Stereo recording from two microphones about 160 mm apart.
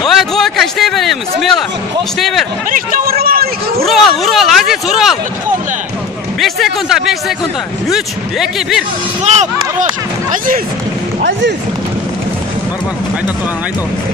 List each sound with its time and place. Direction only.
0.0 s a man's voice: centre (ahead or behind)
2.7 s speech: 65° right (ahead or behind)
3.8 s speech: centre (ahead or behind)
6.4 s speech: centre (ahead or behind)
9.2 s speech: 45° right (ahead or behind)
10.3 s speech: 60° right (ahead or behind)